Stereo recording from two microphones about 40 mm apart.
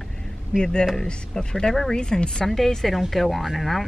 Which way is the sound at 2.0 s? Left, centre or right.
Left.